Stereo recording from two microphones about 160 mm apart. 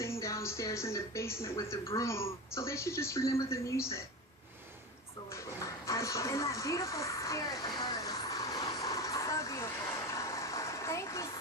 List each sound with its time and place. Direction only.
0.0 s speech: 20° left (ahead or behind)
5.8 s a sound: 20° left (ahead or behind)
10.2 s vehicle: 20° left (ahead or behind)